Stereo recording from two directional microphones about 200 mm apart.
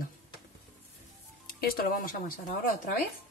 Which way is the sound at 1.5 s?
50° left (ahead or behind).